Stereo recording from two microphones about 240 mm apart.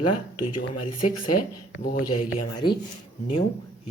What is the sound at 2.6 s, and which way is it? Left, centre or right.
Speech, centre.